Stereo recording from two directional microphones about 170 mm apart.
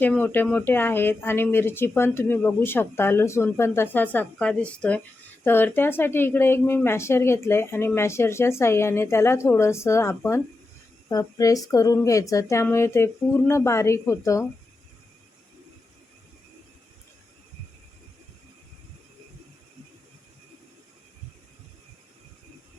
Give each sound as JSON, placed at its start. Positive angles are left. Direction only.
{"t": 0.0, "sound": "speech", "side_deg": 10}